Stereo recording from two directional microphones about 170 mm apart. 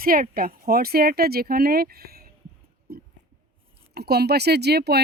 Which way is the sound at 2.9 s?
65° right (ahead or behind).